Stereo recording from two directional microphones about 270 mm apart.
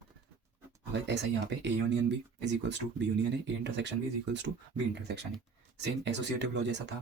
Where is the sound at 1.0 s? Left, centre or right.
Right.